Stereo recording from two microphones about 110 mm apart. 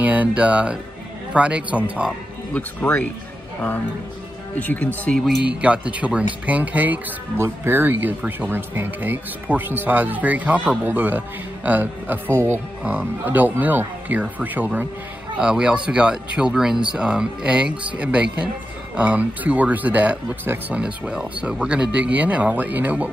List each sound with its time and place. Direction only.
0.0 s speech: 15° right (ahead or behind)
2.5 s speech: 10° left (ahead or behind)
4.6 s speech: 15° left (ahead or behind)
5.6 s speech: 10° right (ahead or behind)